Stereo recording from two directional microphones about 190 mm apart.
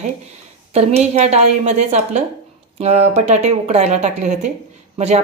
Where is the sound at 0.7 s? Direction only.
35° right (ahead or behind).